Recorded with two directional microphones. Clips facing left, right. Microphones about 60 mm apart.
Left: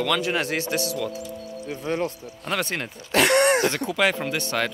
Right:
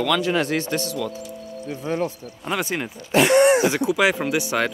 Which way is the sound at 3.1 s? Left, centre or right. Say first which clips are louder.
Right 3 dB; left.